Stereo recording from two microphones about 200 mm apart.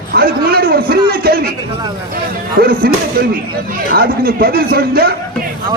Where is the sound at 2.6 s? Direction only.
50° right (ahead or behind).